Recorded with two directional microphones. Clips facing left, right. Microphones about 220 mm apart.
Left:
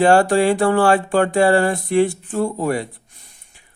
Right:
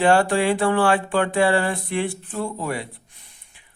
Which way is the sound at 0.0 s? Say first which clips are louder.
Left 4 dB; 40° left (ahead or behind).